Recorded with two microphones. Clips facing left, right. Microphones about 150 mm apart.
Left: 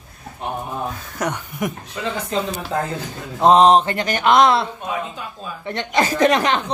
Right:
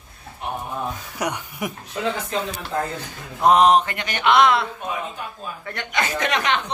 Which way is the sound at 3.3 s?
25° left (ahead or behind).